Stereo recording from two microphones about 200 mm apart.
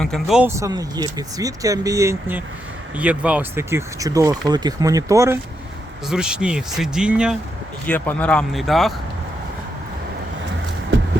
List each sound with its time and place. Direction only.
0.0 s speech: centre (ahead or behind); by 5.4 s 15° right (ahead or behind)
6.1 s speech: 5° right (ahead or behind)
7.9 s speech: 10° left (ahead or behind)